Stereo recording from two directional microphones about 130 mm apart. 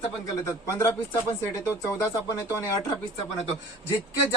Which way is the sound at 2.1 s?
25° left (ahead or behind).